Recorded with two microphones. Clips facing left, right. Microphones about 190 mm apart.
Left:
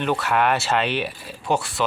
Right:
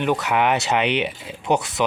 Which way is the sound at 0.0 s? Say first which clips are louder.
Right 1 dB; 15° right (ahead or behind).